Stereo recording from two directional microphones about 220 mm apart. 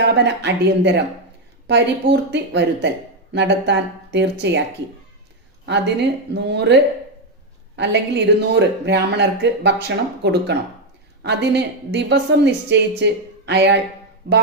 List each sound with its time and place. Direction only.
0.3 s speech: 50° right (ahead or behind)
5.6 s speech: 50° right (ahead or behind)
7.8 s speech: 50° right (ahead or behind)